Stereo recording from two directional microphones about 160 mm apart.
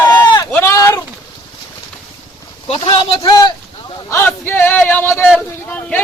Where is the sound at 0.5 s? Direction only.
20° left (ahead or behind).